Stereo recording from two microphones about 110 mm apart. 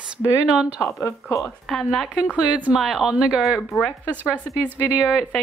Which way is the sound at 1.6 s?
Centre (ahead or behind).